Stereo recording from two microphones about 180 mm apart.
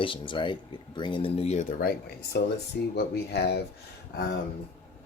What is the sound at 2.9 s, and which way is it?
Speech, 65° left (ahead or behind).